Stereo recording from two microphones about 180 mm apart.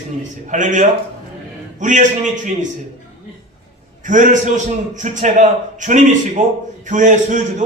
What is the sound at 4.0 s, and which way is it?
A man's voice, 45° right (ahead or behind).